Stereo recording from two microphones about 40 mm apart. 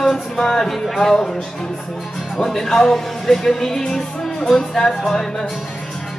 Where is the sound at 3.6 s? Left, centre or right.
Centre.